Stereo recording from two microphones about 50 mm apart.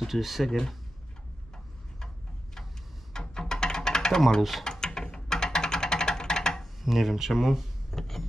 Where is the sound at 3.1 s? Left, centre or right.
Centre.